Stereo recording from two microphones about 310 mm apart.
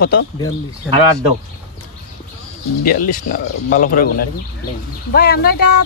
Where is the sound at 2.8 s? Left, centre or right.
Left.